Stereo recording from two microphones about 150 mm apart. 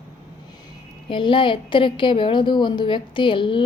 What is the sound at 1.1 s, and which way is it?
Speech, 35° left (ahead or behind).